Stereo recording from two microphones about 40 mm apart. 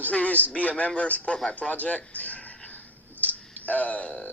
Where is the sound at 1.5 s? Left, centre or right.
Left.